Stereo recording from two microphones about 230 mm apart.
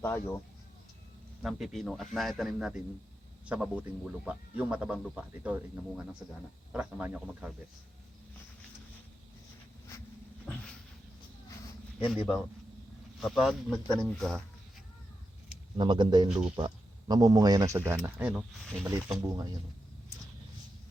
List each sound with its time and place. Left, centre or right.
0.0 s speech: centre
1.4 s speech: centre
12.0 s speech: centre
15.8 s speech: centre